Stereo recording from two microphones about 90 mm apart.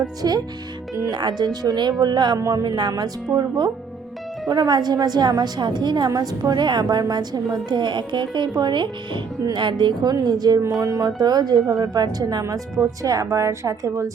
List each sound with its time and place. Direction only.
0.2 s a woman's voice: 45° right (ahead or behind)
3.3 s speech: 15° right (ahead or behind)
4.4 s a woman's voice: 50° right (ahead or behind)